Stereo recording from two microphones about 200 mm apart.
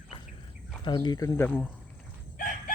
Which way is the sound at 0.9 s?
20° left (ahead or behind).